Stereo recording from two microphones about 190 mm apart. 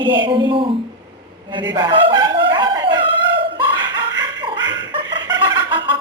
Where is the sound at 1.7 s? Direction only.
25° right (ahead or behind).